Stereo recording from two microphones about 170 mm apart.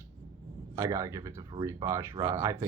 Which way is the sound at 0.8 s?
15° right (ahead or behind).